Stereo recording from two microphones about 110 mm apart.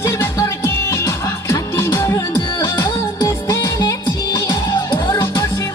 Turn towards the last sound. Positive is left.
turn(degrees=30)  # may be behind; listen again after turning